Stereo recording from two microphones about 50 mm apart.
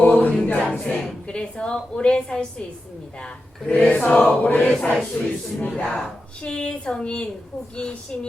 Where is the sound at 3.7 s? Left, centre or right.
Left.